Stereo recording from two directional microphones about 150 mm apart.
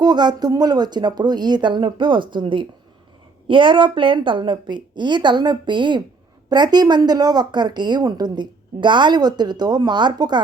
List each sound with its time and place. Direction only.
0.0 s a woman's voice: 30° right (ahead or behind)